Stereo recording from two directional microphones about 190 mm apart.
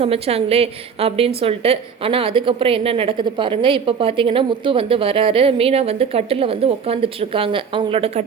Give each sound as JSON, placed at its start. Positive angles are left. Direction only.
{"t": 0.0, "sound": "a woman's voice", "side_deg": -30}